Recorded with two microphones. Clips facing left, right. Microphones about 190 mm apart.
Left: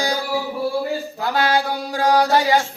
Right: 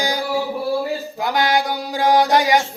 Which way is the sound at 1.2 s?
15° right (ahead or behind).